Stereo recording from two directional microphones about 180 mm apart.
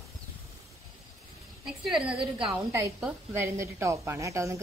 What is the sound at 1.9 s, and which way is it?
Speech, 5° right (ahead or behind).